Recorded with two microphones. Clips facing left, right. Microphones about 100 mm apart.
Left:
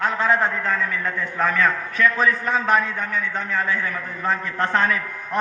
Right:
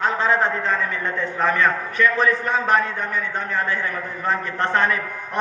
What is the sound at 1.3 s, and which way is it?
Speech, 15° right (ahead or behind).